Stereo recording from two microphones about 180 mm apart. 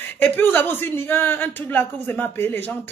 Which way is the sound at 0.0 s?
10° left (ahead or behind).